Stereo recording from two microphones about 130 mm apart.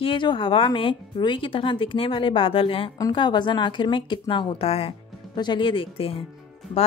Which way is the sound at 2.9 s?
30° left (ahead or behind).